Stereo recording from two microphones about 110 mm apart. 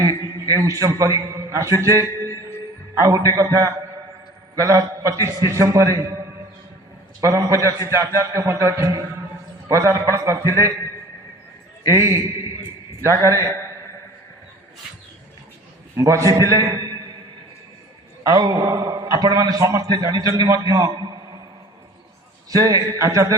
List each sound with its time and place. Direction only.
0.0 s a man's voice: 30° right (ahead or behind)
11.9 s a man's voice: 25° right (ahead or behind)
16.0 s a man's voice: 30° right (ahead or behind)
18.2 s a man's voice: 30° right (ahead or behind)
22.4 s a man's voice: 30° right (ahead or behind)